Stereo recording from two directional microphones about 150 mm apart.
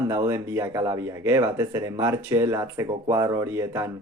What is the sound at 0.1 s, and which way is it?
Speech, 20° right (ahead or behind).